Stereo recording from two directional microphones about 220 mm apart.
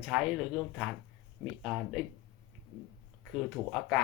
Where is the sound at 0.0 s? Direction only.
Centre (ahead or behind).